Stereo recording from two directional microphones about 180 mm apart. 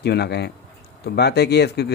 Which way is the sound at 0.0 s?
65° left (ahead or behind).